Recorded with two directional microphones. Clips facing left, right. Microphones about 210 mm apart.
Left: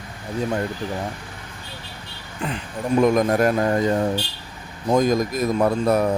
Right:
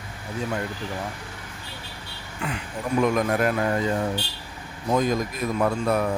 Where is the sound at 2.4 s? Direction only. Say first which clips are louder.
Left 3 dB; 35° left (ahead or behind).